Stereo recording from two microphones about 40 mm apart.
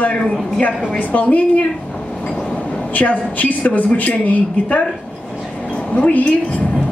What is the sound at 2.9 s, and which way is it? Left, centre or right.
A woman's voice, left.